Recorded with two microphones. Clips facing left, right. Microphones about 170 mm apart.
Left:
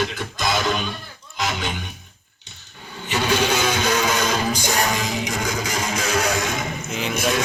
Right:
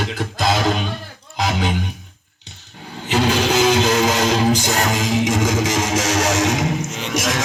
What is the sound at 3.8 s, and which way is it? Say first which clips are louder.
Music: right 4 dB; 90° right.